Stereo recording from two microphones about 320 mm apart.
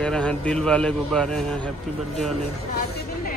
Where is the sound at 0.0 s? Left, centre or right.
Centre.